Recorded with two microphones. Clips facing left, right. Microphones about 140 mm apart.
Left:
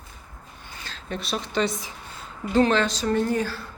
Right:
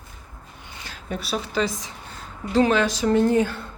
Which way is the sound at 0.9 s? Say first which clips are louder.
Right 2 dB; 10° right (ahead or behind).